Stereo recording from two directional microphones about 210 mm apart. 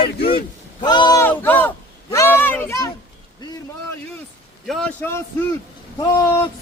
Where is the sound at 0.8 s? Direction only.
20° left (ahead or behind).